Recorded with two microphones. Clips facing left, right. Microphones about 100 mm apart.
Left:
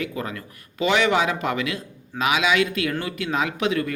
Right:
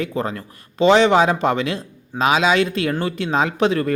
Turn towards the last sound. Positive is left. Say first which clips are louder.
# right 5 dB
turn(degrees=-35)  # may be behind; listen again after turning